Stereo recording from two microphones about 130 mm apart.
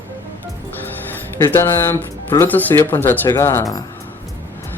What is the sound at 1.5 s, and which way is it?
Speech, 20° left (ahead or behind).